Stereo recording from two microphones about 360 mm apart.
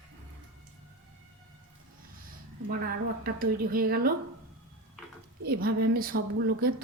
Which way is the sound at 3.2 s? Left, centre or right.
Right.